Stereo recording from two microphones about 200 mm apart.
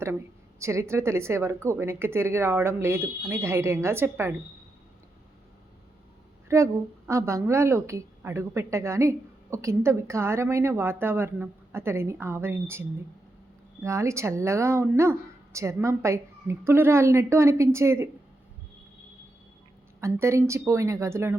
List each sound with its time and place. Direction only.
0.6 s a woman's voice: 15° right (ahead or behind)
6.5 s a woman's voice: 15° right (ahead or behind)
13.8 s a woman's voice: 15° right (ahead or behind)
20.0 s a woman's voice: 15° right (ahead or behind)